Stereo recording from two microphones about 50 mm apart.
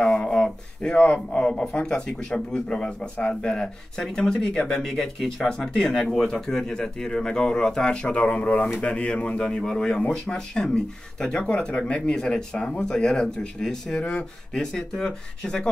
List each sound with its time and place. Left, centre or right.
0.0 s a sound: centre
1.3 s speech: centre
4.8 s speech: centre